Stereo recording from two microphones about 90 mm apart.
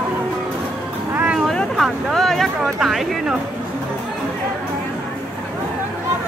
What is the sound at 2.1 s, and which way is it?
Speech, 5° left (ahead or behind).